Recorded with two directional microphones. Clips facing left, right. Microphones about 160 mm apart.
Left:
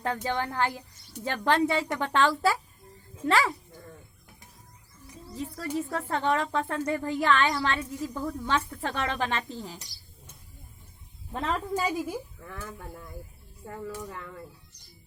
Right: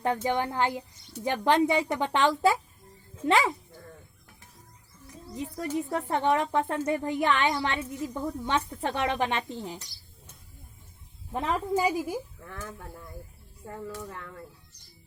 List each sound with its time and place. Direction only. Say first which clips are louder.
0.0 s speech: right 3 dB; 20° right (ahead or behind)
5.3 s speech: right 1 dB; 20° right (ahead or behind)
11.3 s a woman's voice: right 2 dB; 15° right (ahead or behind)
12.6 s speech: even; centre (ahead or behind)